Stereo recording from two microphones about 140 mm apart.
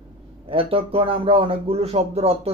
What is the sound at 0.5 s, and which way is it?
Speech, 40° right (ahead or behind).